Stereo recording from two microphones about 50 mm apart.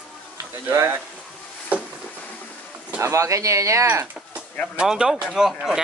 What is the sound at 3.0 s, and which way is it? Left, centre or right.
Speech, right.